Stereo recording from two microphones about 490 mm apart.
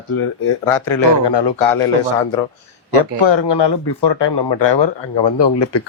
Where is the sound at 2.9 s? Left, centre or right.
Left.